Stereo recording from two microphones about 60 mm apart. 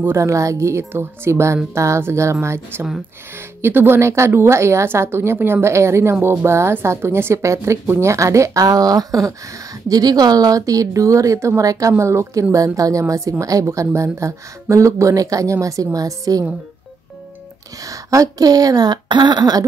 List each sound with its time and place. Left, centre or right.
0.2 s a woman's voice: right
12.0 s a woman's voice: right
12.5 s a woman's voice: right
17.8 s speech: right